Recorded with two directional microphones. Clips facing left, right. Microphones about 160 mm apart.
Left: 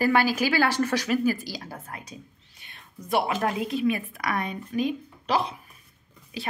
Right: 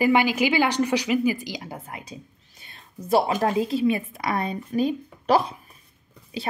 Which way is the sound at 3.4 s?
30° right (ahead or behind).